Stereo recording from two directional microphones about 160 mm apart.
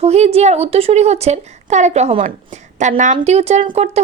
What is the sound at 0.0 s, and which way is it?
A woman's voice, 40° right (ahead or behind).